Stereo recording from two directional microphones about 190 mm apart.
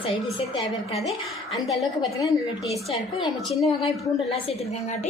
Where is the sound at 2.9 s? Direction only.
30° left (ahead or behind).